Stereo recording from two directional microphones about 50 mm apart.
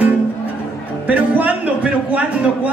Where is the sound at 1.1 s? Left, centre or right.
Right.